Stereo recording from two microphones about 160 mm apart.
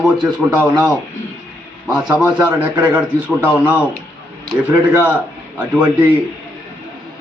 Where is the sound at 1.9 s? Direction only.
5° right (ahead or behind).